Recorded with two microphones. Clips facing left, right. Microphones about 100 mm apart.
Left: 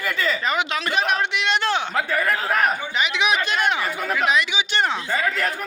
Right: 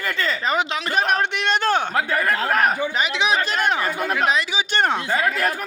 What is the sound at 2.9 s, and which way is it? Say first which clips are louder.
Speech: right 1 dB; 35° right (ahead or behind).